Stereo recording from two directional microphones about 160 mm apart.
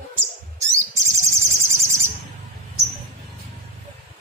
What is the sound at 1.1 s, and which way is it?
Cricket, 15° right (ahead or behind).